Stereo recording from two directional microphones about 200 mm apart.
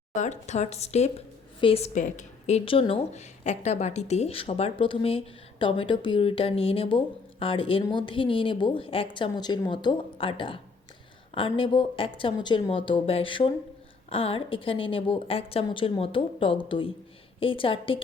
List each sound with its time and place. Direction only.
0.1 s a woman's voice: 35° left (ahead or behind)